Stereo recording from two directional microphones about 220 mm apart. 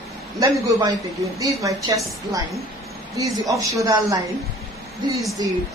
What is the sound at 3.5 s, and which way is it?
Speech, 15° right (ahead or behind).